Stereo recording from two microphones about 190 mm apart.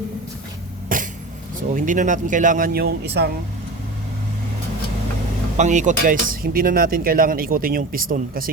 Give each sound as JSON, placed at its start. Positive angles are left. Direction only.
{"t": 0.9, "sound": "cough", "side_deg": -45}
{"t": 1.7, "sound": "speech", "side_deg": -45}
{"t": 5.5, "sound": "speech", "side_deg": -40}